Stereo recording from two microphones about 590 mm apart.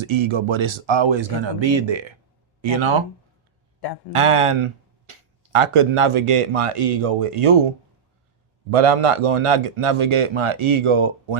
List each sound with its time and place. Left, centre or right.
0.0 s a man's voice: right
4.1 s speech: right
8.7 s a man's voice: right